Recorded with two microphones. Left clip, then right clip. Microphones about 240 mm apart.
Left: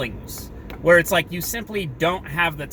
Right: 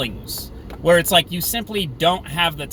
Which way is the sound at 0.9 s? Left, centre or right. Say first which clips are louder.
Right 1 dB; right.